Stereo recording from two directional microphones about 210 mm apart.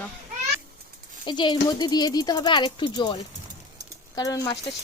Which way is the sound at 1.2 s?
20° left (ahead or behind).